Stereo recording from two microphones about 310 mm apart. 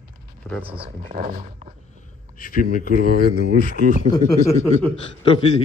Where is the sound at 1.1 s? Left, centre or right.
Right.